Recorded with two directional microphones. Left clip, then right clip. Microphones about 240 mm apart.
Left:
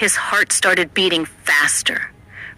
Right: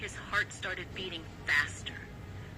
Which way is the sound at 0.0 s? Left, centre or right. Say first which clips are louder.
Left 17 dB; left.